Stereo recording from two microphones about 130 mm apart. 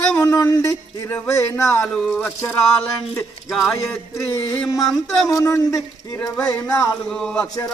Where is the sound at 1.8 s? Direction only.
5° left (ahead or behind).